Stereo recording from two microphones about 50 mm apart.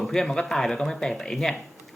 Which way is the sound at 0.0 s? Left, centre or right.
Centre.